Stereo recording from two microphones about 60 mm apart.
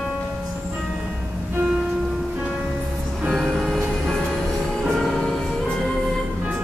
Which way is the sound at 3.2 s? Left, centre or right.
Centre.